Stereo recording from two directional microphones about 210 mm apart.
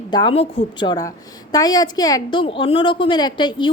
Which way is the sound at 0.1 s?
20° left (ahead or behind).